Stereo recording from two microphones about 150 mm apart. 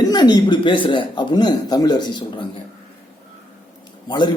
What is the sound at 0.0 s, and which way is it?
Speech, 30° left (ahead or behind).